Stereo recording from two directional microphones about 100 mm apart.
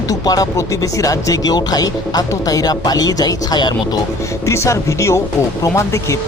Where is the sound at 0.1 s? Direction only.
35° left (ahead or behind).